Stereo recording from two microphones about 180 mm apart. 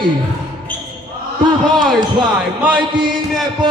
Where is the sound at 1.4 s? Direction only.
25° right (ahead or behind).